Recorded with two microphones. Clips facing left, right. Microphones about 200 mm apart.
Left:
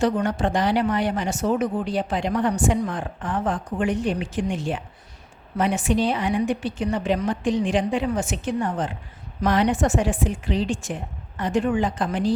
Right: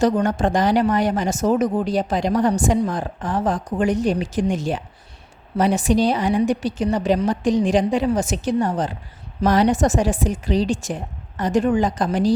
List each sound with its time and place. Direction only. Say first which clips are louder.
0.0 s speech: right 3 dB; 45° right (ahead or behind)